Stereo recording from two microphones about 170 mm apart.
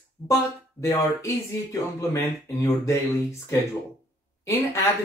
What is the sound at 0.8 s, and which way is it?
Speech, 15° left (ahead or behind).